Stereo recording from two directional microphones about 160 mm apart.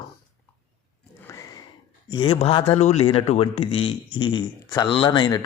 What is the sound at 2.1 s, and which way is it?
A man's voice, 35° left (ahead or behind).